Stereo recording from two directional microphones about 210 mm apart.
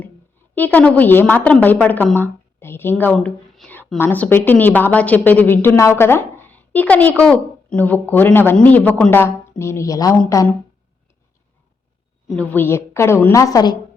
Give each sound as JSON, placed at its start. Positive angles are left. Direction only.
{"t": 0.5, "sound": "a woman's voice", "side_deg": 10}
{"t": 12.4, "sound": "a woman's voice", "side_deg": 10}